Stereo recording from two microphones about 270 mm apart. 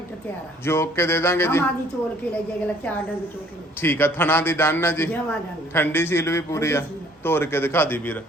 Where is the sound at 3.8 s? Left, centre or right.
Centre.